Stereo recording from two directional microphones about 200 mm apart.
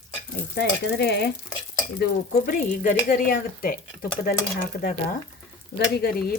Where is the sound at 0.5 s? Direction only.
55° left (ahead or behind).